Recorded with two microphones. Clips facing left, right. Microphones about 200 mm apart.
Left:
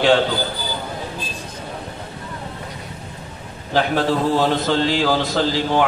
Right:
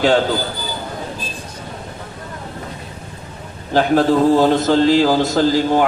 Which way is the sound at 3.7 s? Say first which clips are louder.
Right 5 dB; 45° right (ahead or behind).